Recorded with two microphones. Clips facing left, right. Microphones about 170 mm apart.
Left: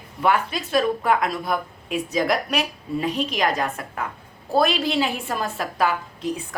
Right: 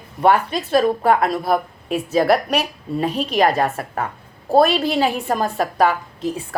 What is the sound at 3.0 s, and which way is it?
Speech, 40° right (ahead or behind).